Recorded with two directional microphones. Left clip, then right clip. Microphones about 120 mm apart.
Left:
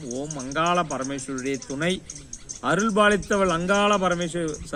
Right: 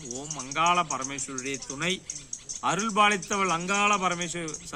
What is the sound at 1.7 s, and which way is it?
A man's voice, 20° right (ahead or behind).